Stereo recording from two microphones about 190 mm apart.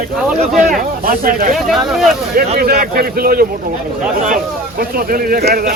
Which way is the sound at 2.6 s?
55° right (ahead or behind).